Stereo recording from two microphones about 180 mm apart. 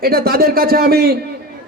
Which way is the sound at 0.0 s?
55° right (ahead or behind).